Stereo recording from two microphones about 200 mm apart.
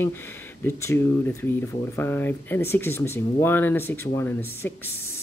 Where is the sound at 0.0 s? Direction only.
10° left (ahead or behind).